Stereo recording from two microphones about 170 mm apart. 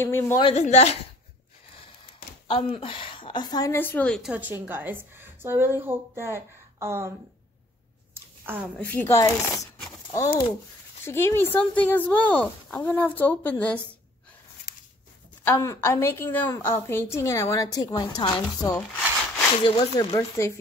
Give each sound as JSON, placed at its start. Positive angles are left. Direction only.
{"t": 0.0, "sound": "a woman's voice", "side_deg": 15}
{"t": 0.4, "sound": "a woman's voice", "side_deg": 35}
{"t": 2.4, "sound": "a woman's voice", "side_deg": 30}
{"t": 3.7, "sound": "a woman's voice", "side_deg": 10}
{"t": 4.3, "sound": "a woman's voice", "side_deg": -10}
{"t": 8.1, "sound": "a sound", "side_deg": -15}
{"t": 8.7, "sound": "a woman's voice", "side_deg": 10}
{"t": 15.4, "sound": "a woman's voice", "side_deg": 15}
{"t": 20.2, "sound": "a woman's voice", "side_deg": 15}